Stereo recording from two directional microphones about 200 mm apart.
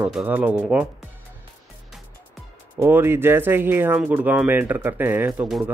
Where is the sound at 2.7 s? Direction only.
10° right (ahead or behind).